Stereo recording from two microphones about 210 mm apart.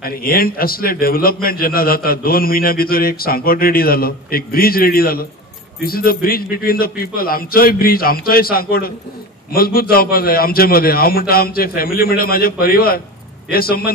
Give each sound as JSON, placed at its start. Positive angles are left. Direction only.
{"t": 0.0, "sound": "a man's voice", "side_deg": 45}